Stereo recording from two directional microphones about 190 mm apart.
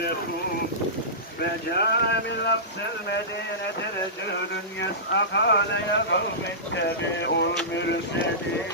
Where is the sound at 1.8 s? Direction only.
60° left (ahead or behind).